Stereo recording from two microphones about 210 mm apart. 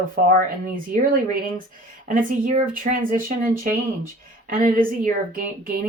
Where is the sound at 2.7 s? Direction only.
40° right (ahead or behind).